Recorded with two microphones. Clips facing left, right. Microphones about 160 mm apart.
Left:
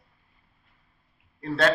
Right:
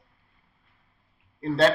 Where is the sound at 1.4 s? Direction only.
30° right (ahead or behind).